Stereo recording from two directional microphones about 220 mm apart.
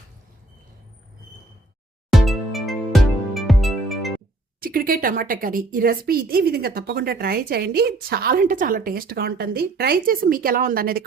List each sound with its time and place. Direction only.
2.1 s music: centre (ahead or behind)
4.6 s a woman's voice: 40° right (ahead or behind)